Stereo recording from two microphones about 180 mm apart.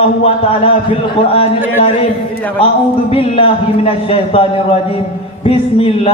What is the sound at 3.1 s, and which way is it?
A man's voice, 30° left (ahead or behind).